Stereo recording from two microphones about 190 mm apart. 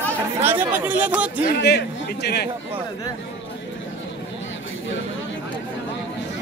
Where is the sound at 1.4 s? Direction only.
55° left (ahead or behind).